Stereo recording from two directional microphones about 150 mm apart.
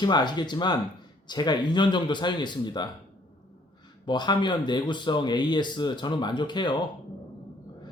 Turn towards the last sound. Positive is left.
turn(degrees=30)  # may be behind; listen again after turning